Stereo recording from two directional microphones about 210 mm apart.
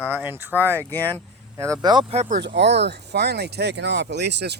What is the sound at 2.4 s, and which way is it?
Speech, 55° right (ahead or behind).